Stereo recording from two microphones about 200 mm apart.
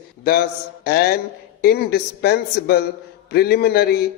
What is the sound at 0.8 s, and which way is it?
Mantra, 55° left (ahead or behind).